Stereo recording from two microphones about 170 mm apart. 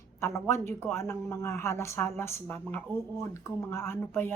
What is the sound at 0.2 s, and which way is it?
A woman's voice, 15° left (ahead or behind).